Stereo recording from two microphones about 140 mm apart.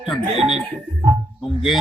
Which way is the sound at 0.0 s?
Centre (ahead or behind).